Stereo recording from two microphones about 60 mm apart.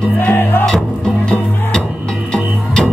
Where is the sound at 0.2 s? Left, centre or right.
Left.